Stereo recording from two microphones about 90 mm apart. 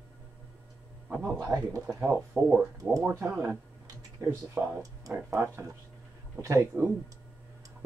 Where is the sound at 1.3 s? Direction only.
35° right (ahead or behind).